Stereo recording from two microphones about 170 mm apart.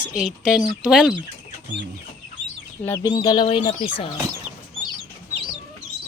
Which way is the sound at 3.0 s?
25° left (ahead or behind).